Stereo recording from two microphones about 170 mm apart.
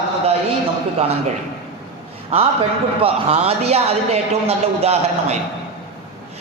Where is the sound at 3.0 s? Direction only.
35° right (ahead or behind).